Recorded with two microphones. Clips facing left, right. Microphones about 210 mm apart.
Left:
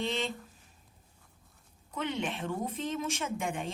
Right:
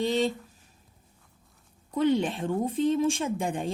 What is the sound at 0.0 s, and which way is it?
Speech, 35° right (ahead or behind).